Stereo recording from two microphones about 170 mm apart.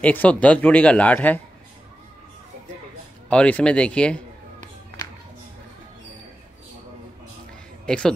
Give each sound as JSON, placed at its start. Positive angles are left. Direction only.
{"t": 0.0, "sound": "speech", "side_deg": 10}
{"t": 3.3, "sound": "speech", "side_deg": 10}
{"t": 7.8, "sound": "speech", "side_deg": 5}